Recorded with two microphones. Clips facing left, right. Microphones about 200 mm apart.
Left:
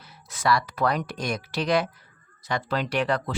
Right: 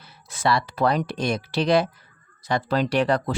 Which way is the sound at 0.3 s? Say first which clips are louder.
Right 1 dB; 25° right (ahead or behind).